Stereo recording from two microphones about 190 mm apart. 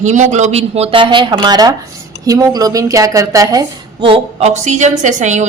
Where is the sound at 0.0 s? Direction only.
40° right (ahead or behind).